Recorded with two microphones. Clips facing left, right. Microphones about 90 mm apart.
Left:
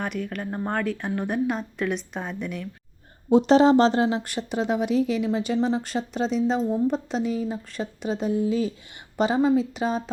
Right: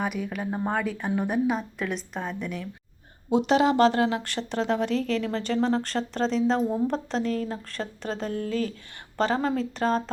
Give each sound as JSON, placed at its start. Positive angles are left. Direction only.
{"t": 0.0, "sound": "speech", "side_deg": -5}
{"t": 3.2, "sound": "speech", "side_deg": 35}
{"t": 6.6, "sound": "speech", "side_deg": -10}
{"t": 6.8, "sound": "speech", "side_deg": 5}